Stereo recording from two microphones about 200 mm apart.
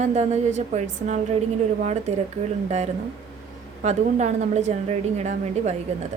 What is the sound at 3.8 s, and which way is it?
A woman's voice, 35° right (ahead or behind).